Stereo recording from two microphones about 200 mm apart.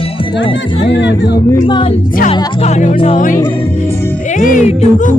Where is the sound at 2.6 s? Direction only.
35° left (ahead or behind).